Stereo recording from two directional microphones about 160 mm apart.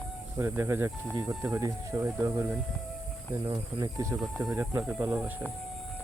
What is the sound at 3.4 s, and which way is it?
Speech, 25° right (ahead or behind).